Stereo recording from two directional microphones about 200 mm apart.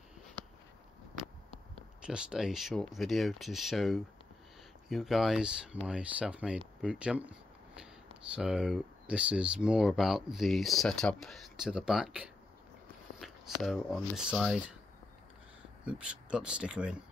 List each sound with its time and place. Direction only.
1.8 s speech: 5° right (ahead or behind)
15.8 s speech: 5° right (ahead or behind)